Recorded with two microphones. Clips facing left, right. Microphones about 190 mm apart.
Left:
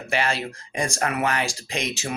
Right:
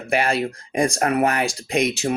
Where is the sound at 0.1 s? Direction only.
55° right (ahead or behind).